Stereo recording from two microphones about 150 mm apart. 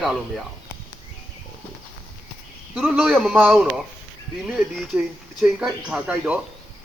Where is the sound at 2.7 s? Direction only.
5° right (ahead or behind).